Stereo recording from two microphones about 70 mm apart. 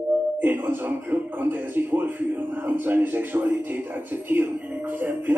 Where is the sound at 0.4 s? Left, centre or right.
Right.